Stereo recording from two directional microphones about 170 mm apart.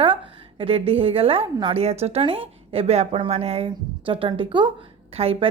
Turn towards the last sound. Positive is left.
turn(degrees=-35)  # may be behind; listen again after turning